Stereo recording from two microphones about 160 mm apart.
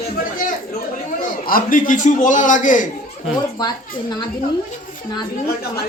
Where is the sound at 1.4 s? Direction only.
60° left (ahead or behind).